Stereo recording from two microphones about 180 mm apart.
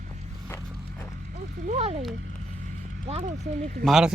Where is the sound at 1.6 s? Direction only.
35° right (ahead or behind).